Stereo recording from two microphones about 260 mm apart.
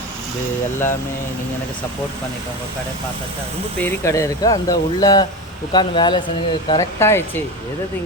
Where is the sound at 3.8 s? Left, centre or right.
Centre.